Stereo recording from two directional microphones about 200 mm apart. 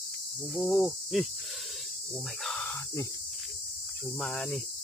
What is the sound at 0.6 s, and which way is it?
Cricket, centre (ahead or behind).